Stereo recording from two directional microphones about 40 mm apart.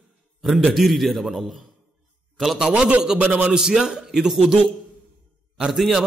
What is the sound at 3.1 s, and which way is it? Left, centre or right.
Speech, right.